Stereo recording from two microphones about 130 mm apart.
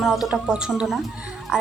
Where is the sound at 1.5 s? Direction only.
5° right (ahead or behind).